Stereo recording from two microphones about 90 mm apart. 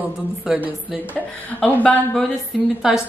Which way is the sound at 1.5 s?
20° left (ahead or behind).